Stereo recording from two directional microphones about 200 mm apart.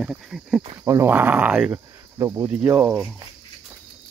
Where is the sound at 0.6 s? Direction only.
30° right (ahead or behind).